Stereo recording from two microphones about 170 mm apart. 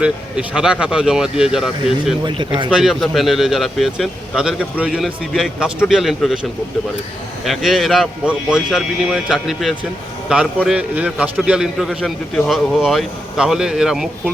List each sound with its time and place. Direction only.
0.0 s a man's voice: 5° right (ahead or behind)
2.2 s speech: 25° right (ahead or behind)
2.6 s a man's voice: centre (ahead or behind)
7.4 s a man's voice: centre (ahead or behind)